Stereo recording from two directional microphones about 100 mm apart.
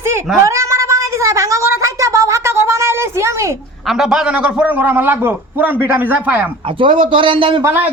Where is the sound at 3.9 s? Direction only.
5° right (ahead or behind).